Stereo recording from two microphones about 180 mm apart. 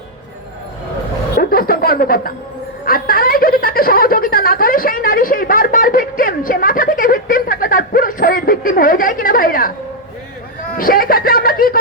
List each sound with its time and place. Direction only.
1.4 s chuckle: 55° left (ahead or behind)
2.8 s a sound: 55° left (ahead or behind)
10.8 s speech: 55° left (ahead or behind)